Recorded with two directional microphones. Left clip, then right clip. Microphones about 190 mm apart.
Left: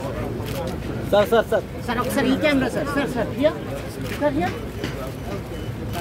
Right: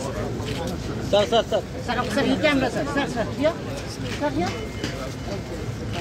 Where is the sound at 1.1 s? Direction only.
55° left (ahead or behind).